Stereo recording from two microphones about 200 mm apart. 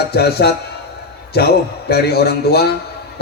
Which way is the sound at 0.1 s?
55° left (ahead or behind).